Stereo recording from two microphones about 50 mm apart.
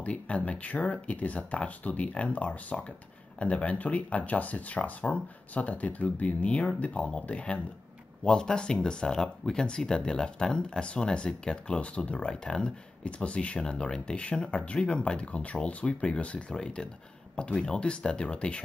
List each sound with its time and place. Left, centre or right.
0.0 s speech: left
8.2 s speech: centre